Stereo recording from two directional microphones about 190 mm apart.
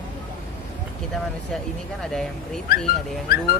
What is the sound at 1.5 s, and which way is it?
Speech, centre (ahead or behind).